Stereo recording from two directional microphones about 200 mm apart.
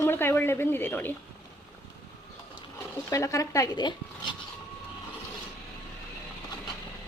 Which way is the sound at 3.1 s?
15° left (ahead or behind).